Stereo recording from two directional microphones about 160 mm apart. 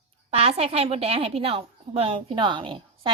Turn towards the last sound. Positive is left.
turn(degrees=-35)  # may be behind; listen again after turning